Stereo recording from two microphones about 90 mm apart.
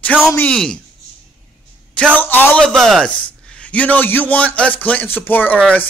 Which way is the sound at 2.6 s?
5° left (ahead or behind).